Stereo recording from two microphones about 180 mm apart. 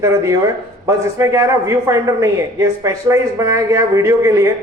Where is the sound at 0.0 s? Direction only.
15° right (ahead or behind).